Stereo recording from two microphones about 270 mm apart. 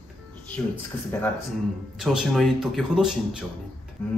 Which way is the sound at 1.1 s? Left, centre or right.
Centre.